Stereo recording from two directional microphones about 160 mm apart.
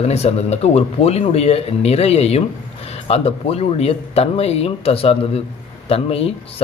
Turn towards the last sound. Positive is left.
turn(degrees=40)  # may be behind; listen again after turning